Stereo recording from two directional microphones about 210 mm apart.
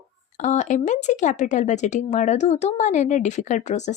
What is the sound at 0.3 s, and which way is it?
Speech, 35° left (ahead or behind).